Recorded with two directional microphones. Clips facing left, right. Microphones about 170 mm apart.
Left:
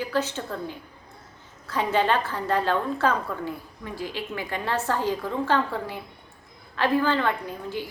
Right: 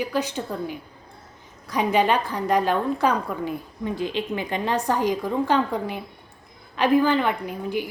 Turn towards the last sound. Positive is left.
turn(degrees=-15)  # may be behind; listen again after turning